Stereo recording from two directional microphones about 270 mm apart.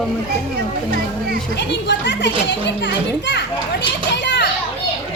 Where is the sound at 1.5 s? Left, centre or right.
Left.